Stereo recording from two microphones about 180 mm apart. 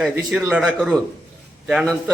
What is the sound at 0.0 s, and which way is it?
Speech, centre (ahead or behind).